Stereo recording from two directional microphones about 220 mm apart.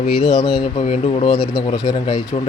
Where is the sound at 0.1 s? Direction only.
Centre (ahead or behind).